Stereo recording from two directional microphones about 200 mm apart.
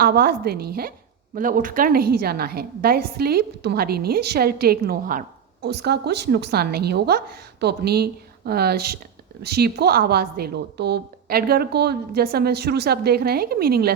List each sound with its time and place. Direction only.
0.0 s a woman's voice: 50° right (ahead or behind)